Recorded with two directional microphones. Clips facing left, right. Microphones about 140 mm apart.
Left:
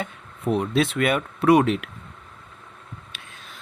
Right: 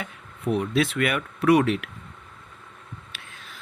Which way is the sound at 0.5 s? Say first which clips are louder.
Left 1 dB; 25° left (ahead or behind).